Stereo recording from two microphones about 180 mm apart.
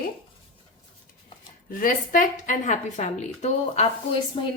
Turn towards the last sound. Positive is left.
turn(degrees=30)  # may be behind; listen again after turning